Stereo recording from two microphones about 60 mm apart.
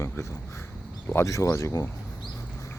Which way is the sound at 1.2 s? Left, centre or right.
Left.